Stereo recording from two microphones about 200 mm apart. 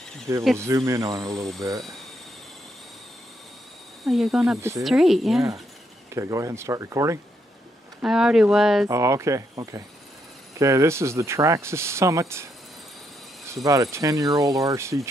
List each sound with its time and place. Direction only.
0.6 s speech: 15° right (ahead or behind)
4.0 s speech: centre (ahead or behind)
4.6 s speech: 15° right (ahead or behind)
4.8 s speech: centre (ahead or behind)
6.1 s speech: 15° right (ahead or behind)
8.0 s speech: 5° right (ahead or behind)
8.8 s speech: 15° right (ahead or behind)
13.7 s speech: 15° right (ahead or behind)